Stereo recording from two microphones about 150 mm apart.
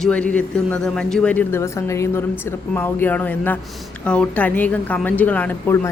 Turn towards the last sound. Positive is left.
turn(degrees=15)  # may be behind; listen again after turning